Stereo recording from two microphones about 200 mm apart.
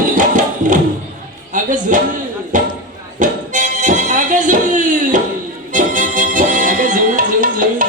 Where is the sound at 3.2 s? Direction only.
40° right (ahead or behind).